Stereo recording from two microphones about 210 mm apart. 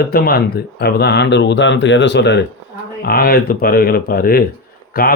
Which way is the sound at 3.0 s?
45° left (ahead or behind).